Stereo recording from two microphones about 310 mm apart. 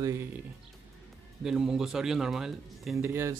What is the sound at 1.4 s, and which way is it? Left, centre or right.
Speech, centre.